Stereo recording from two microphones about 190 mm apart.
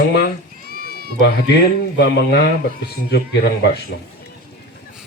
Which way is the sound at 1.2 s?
60° left (ahead or behind).